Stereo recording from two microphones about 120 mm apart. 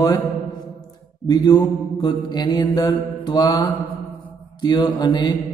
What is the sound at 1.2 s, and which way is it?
A man's voice, 35° left (ahead or behind).